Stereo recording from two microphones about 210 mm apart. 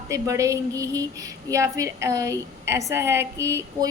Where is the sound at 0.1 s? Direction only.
15° right (ahead or behind).